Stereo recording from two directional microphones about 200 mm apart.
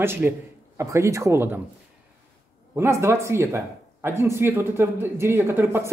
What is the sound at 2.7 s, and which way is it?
Speech, 15° right (ahead or behind).